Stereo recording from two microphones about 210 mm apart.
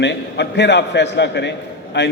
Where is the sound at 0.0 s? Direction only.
55° left (ahead or behind).